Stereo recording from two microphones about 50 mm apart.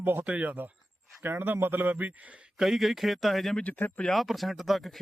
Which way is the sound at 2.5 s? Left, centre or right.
Centre.